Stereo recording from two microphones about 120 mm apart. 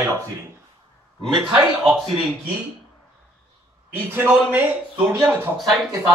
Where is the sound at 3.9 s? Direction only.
15° right (ahead or behind).